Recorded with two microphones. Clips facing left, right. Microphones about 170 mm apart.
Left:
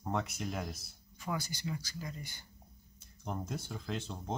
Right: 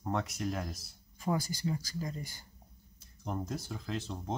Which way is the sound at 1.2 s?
40° right (ahead or behind).